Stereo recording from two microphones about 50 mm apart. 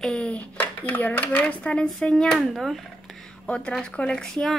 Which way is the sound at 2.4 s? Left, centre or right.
Centre.